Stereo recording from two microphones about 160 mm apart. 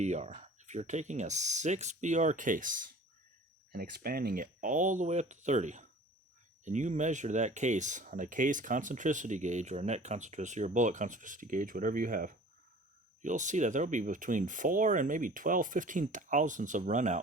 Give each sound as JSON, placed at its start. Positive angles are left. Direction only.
{"t": 0.0, "sound": "speech", "side_deg": -45}
{"t": 3.7, "sound": "speech", "side_deg": -70}